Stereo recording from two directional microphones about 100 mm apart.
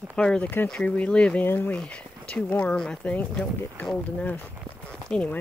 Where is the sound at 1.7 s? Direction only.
10° left (ahead or behind).